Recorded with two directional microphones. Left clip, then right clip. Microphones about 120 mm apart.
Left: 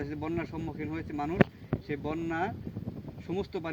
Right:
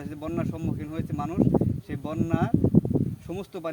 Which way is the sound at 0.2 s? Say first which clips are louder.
Right 3 dB; 35° right (ahead or behind).